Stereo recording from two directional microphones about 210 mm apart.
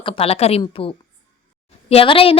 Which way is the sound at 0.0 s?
30° left (ahead or behind).